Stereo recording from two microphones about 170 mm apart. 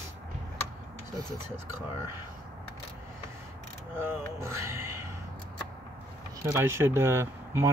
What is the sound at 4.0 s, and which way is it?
Speech, 15° right (ahead or behind).